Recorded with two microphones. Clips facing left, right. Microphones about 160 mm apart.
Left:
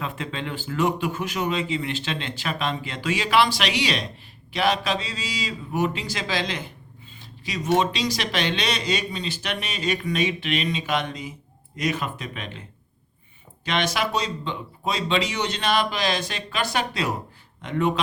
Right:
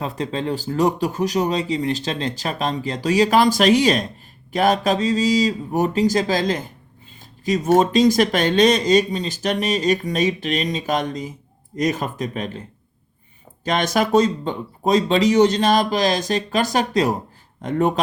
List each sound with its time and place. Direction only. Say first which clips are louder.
0.0 s speech: right 6 dB; 35° right (ahead or behind)
13.7 s speech: right 6 dB; 45° right (ahead or behind)